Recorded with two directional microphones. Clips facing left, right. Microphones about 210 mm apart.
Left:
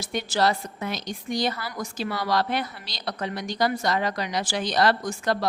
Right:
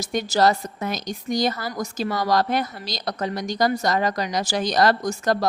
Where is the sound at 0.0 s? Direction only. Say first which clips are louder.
Right 4 dB; 40° right (ahead or behind).